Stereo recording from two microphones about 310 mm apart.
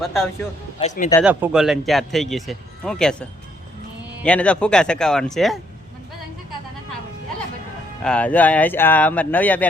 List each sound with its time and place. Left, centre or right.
0.0 s speech: centre
0.8 s speech: left
1.2 s speech: centre
8.0 s speech: centre